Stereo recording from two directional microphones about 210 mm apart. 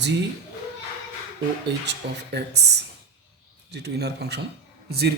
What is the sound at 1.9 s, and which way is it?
A man's voice, 50° right (ahead or behind).